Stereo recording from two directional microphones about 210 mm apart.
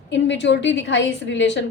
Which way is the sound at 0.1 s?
60° left (ahead or behind).